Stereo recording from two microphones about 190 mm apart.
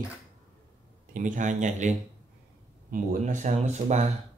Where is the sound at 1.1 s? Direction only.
40° right (ahead or behind).